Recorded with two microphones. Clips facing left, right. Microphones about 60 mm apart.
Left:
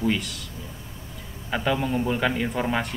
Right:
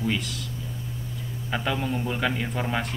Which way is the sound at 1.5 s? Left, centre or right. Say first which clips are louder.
Left 3 dB; centre.